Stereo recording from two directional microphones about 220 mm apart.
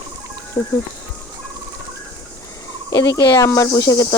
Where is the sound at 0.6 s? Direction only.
10° left (ahead or behind).